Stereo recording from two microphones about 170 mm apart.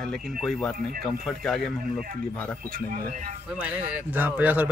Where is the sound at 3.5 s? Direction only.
10° right (ahead or behind).